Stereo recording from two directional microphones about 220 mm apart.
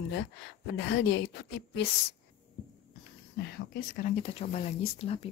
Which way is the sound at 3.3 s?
45° left (ahead or behind).